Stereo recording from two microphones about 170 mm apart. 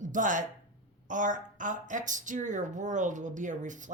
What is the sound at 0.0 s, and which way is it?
Speech, 50° right (ahead or behind).